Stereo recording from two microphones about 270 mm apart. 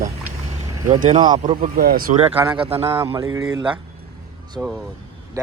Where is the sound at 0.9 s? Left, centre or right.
Right.